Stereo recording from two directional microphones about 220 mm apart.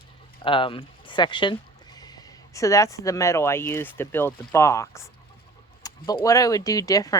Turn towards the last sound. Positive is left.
turn(degrees=15)  # may be behind; listen again after turning